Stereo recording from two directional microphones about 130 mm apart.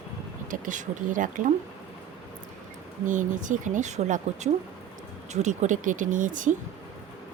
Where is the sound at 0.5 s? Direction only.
85° right.